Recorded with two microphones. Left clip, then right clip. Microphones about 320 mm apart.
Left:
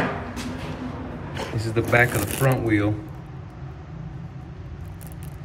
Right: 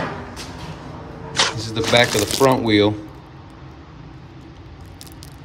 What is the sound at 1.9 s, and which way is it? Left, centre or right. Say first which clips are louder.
Speech: right 5 dB; centre.